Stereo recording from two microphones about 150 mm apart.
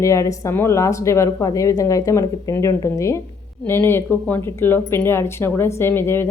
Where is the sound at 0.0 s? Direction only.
20° left (ahead or behind).